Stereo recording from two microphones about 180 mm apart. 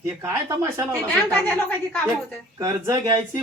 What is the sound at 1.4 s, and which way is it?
Speech, 10° left (ahead or behind).